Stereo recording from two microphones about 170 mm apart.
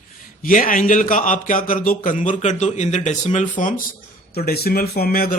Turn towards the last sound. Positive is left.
turn(degrees=60)  # may be behind; listen again after turning